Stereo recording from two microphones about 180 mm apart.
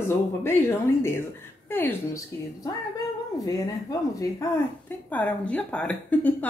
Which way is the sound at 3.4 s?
20° left (ahead or behind).